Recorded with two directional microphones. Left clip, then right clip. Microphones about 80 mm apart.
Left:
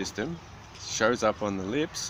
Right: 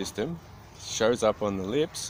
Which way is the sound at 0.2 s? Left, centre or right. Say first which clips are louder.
Right 1 dB; right.